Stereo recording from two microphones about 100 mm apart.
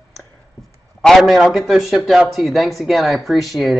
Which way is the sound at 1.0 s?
Centre (ahead or behind).